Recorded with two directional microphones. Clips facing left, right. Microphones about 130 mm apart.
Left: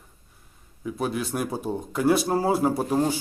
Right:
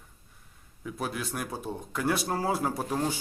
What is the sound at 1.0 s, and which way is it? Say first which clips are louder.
Speech: left 6 dB; 5° left (ahead or behind).